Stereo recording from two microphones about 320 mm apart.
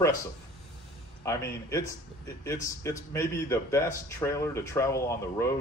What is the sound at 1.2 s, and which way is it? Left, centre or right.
A man's voice, centre.